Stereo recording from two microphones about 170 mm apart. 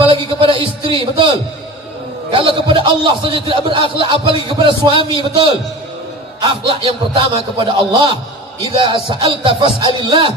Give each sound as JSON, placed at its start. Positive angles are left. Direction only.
{"t": 0.0, "sound": "a man's voice", "side_deg": -30}
{"t": 2.3, "sound": "a man's voice", "side_deg": -30}
{"t": 7.2, "sound": "a man's voice", "side_deg": -30}